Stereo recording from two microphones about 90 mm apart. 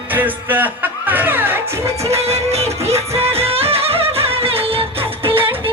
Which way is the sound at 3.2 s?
90° right.